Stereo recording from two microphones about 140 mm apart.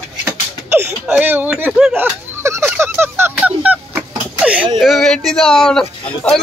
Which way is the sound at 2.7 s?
15° right (ahead or behind).